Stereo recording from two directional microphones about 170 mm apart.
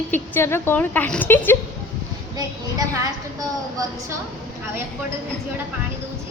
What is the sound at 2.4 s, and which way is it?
Child singing, 20° right (ahead or behind).